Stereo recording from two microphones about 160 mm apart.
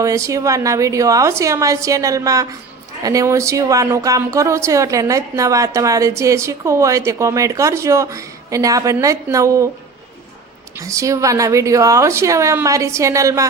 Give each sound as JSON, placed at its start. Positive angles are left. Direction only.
{"t": 0.0, "sound": "speech", "side_deg": -20}
{"t": 10.8, "sound": "speech", "side_deg": -20}